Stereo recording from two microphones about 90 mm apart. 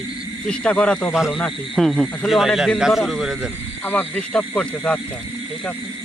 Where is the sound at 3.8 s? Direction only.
20° left (ahead or behind).